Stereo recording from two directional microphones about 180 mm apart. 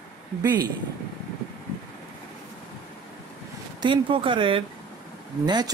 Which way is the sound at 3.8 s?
30° right (ahead or behind).